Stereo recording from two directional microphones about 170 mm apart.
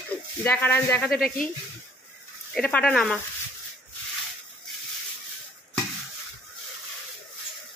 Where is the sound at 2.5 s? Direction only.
5° left (ahead or behind).